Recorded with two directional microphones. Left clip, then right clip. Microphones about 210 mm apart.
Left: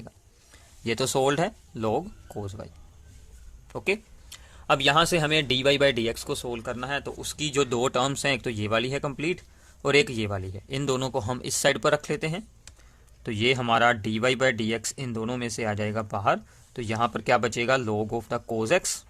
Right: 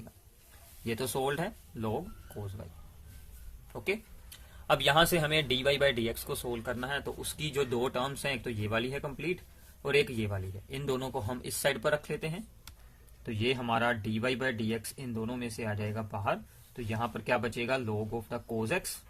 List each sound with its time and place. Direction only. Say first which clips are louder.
0.9 s speech: left 8 dB; 40° left (ahead or behind)